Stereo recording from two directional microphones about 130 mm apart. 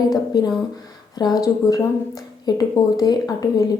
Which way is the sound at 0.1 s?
30° left (ahead or behind).